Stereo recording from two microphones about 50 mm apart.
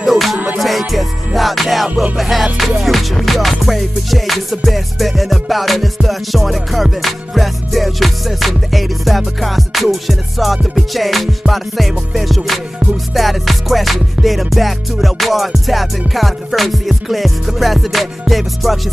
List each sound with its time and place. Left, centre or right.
0.0 s music: centre